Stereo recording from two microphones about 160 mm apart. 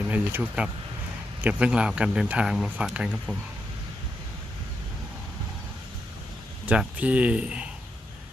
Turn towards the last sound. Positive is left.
turn(degrees=-5)  # may be behind; listen again after turning